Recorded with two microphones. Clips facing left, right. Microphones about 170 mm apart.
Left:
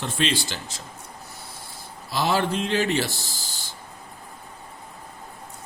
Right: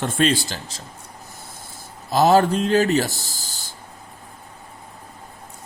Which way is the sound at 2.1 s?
45° right (ahead or behind).